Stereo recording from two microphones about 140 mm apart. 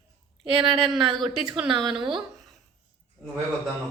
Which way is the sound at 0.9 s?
Centre (ahead or behind).